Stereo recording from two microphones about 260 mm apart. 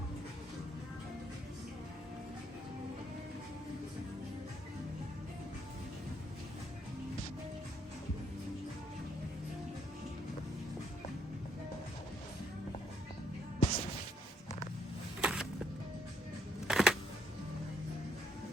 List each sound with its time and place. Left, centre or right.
13.6 s music: left
15.2 s music: centre
16.6 s a sound: centre